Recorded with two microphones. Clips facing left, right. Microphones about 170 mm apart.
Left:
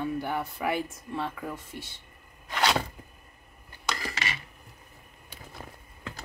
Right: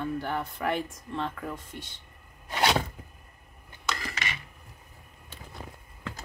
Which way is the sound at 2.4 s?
20° right (ahead or behind).